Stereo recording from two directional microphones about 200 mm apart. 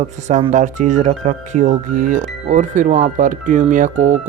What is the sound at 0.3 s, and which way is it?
Speech, 35° right (ahead or behind).